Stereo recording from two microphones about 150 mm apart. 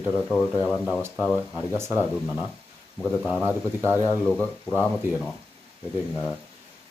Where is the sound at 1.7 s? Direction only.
15° right (ahead or behind).